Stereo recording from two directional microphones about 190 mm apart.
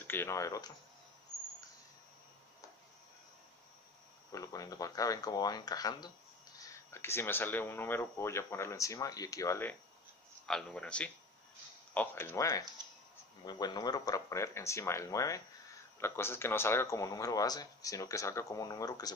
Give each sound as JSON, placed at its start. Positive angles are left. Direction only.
{"t": 0.0, "sound": "speech", "side_deg": 10}
{"t": 4.3, "sound": "speech", "side_deg": 20}